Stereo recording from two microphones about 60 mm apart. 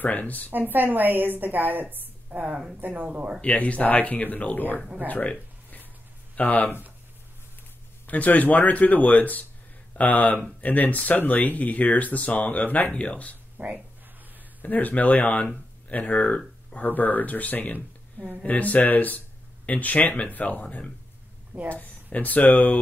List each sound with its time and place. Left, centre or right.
0.0 s speech: left
0.5 s a woman's voice: right
3.3 s speech: left
4.7 s speech: centre
5.0 s a sound: left
6.3 s speech: left
8.1 s speech: left
13.6 s a woman's voice: right
14.6 s speech: left